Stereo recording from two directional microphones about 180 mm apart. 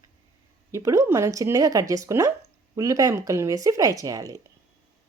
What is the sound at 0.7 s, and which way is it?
Speech, 15° right (ahead or behind).